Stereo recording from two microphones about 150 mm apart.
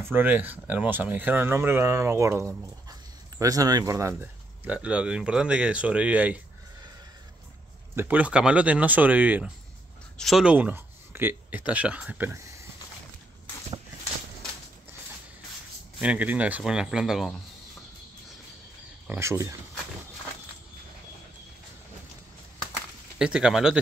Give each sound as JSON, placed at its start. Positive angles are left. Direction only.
{"t": 0.0, "sound": "speech", "side_deg": -15}
{"t": 4.6, "sound": "speech", "side_deg": -10}
{"t": 7.9, "sound": "speech", "side_deg": -15}
{"t": 10.1, "sound": "speech", "side_deg": 0}
{"t": 16.0, "sound": "speech", "side_deg": -10}
{"t": 19.0, "sound": "speech", "side_deg": -20}
{"t": 23.1, "sound": "speech", "side_deg": -5}